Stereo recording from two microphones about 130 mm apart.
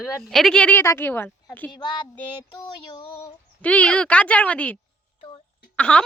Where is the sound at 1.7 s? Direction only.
35° left (ahead or behind).